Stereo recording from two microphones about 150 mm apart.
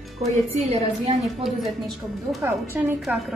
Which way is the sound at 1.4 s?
Centre (ahead or behind).